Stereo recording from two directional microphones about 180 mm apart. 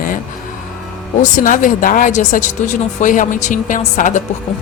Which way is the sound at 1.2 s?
45° left (ahead or behind).